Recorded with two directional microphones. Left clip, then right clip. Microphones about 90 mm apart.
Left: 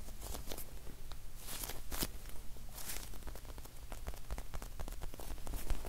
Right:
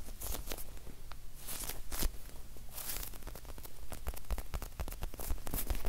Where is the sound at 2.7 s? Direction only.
25° right (ahead or behind).